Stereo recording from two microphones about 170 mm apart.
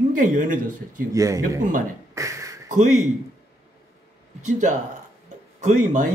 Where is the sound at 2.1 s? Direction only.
20° right (ahead or behind).